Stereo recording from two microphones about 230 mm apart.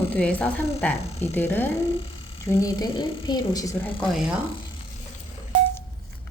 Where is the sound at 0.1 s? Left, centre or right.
Centre.